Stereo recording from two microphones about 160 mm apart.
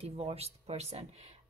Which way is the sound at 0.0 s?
35° right (ahead or behind).